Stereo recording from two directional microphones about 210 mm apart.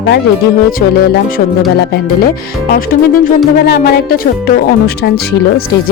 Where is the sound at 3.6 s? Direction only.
50° left (ahead or behind).